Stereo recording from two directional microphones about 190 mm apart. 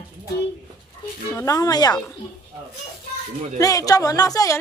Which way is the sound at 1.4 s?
20° left (ahead or behind).